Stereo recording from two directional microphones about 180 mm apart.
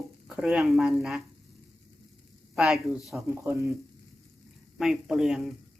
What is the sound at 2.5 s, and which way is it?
Speech, 5° right (ahead or behind).